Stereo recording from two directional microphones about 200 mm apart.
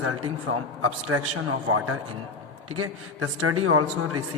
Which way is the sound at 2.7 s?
90° right.